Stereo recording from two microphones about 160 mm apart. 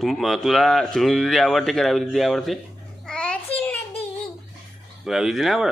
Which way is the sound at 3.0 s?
5° left (ahead or behind).